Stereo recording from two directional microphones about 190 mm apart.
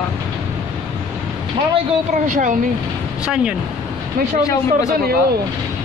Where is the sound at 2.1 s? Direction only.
40° right (ahead or behind).